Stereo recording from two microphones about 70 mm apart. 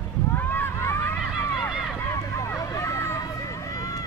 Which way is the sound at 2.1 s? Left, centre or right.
Left.